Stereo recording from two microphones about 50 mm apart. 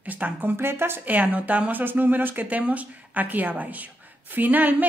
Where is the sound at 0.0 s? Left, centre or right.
Right.